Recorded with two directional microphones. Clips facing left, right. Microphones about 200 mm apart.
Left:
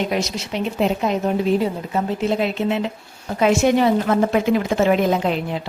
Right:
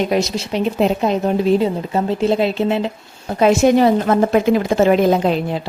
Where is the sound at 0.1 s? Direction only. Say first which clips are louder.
Right 5 dB; 35° right (ahead or behind).